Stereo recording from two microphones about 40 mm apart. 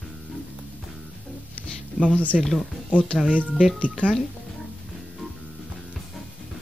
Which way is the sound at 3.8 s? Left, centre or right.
Right.